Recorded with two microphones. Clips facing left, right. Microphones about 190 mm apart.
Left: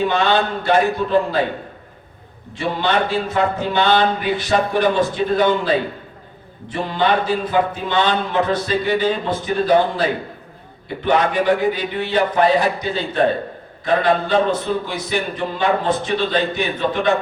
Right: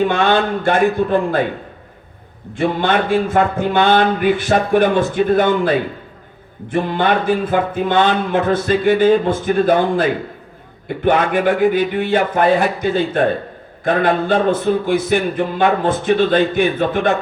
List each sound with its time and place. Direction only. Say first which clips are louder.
0.1 s speech: right 2 dB; 50° right (ahead or behind)
2.6 s speech: right 3 dB; 50° right (ahead or behind)